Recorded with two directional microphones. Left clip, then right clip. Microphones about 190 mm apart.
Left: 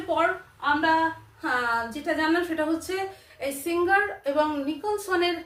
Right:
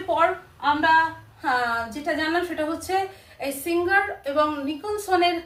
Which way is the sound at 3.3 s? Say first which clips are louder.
Right 1 dB; 20° left (ahead or behind).